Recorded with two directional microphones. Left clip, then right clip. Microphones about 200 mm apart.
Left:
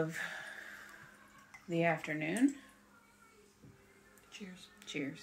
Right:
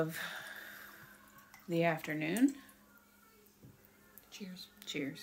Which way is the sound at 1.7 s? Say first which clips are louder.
Even; 15° right (ahead or behind).